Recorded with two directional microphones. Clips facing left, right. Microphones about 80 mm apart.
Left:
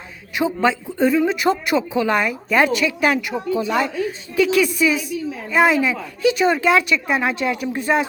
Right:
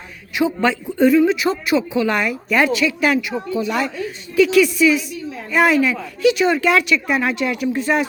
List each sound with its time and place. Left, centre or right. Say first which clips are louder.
0.3 s a woman's voice: right 1 dB; left
1.3 s a woman's voice: right 1 dB; left
1.9 s a woman's voice: even; left